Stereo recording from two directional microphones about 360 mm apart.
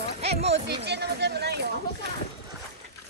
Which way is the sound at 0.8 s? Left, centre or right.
Right.